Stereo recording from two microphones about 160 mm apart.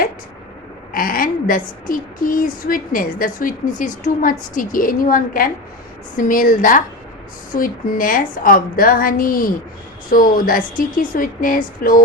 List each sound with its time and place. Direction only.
0.9 s speech: 65° left (ahead or behind)